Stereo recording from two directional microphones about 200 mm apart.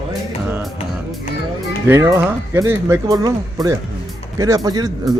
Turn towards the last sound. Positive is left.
turn(degrees=-20)  # may be behind; listen again after turning